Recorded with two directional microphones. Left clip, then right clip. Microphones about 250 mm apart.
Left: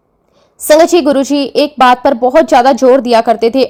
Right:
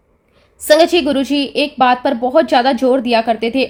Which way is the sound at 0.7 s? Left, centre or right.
Left.